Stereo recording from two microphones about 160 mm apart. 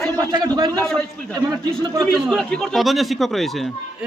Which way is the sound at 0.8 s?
5° left (ahead or behind).